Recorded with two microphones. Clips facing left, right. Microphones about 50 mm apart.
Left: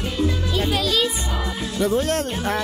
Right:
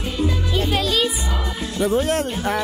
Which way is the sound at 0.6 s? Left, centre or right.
Centre.